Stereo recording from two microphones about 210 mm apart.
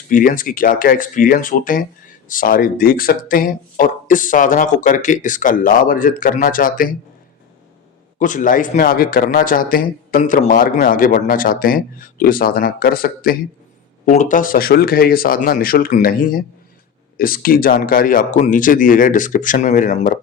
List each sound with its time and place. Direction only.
0.1 s speech: 40° left (ahead or behind)
8.2 s speech: 40° left (ahead or behind)